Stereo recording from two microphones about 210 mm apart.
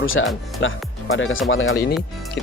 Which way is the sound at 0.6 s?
65° left (ahead or behind).